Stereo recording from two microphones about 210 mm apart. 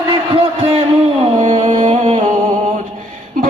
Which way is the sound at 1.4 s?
35° right (ahead or behind).